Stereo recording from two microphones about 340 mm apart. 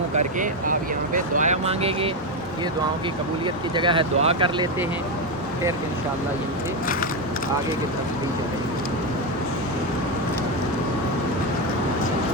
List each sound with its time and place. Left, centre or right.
0.3 s speech: right
3.4 s speech: centre